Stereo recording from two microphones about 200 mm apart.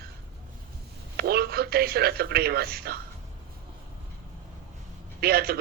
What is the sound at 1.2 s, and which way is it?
Speech, 50° right (ahead or behind).